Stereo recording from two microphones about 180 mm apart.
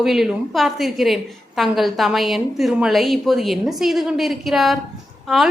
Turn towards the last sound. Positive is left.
turn(degrees=0)  # may be behind; listen again after turning